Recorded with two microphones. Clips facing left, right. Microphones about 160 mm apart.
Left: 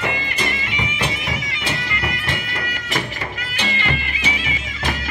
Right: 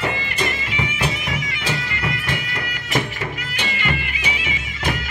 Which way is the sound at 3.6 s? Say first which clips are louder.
Left 1 dB; 30° left (ahead or behind).